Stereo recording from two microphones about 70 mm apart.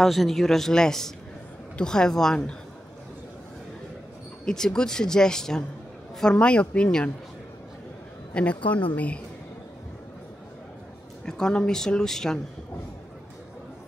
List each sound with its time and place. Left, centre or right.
0.0 s speech: centre
4.5 s speech: centre
8.3 s speech: centre
11.2 s speech: centre